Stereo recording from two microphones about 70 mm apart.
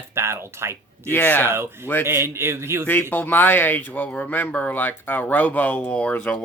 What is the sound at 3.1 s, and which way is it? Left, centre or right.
Speech, left.